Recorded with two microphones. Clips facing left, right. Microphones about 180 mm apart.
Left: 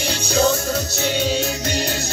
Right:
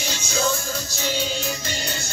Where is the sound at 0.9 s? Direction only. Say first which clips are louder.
Left 3 dB; 65° left (ahead or behind).